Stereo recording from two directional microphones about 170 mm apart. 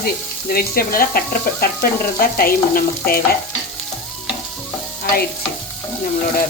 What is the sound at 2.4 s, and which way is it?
Speech, 60° left (ahead or behind).